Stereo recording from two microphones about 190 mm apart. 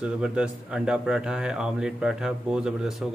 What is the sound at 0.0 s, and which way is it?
A man's voice, 5° right (ahead or behind).